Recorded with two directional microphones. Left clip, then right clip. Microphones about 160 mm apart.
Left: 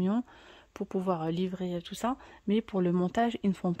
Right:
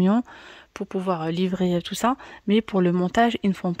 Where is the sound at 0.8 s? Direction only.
5° right (ahead or behind).